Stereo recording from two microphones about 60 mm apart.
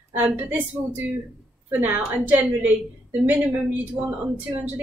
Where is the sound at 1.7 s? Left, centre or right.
Right.